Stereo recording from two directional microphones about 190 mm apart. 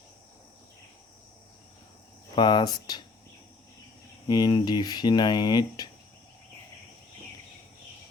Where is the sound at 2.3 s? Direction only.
20° left (ahead or behind).